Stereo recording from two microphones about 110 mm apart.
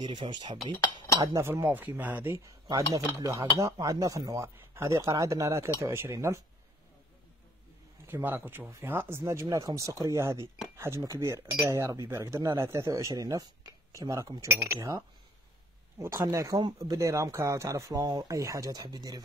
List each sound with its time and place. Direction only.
0.0 s cutlery: 45° right (ahead or behind)
1.3 s speech: 20° right (ahead or behind)
8.1 s speech: 15° right (ahead or behind); by 19.2 s 35° right (ahead or behind)